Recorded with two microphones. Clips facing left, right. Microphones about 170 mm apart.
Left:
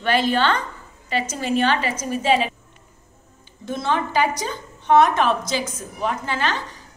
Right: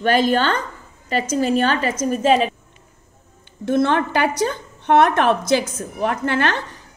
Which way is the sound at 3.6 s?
60° right (ahead or behind).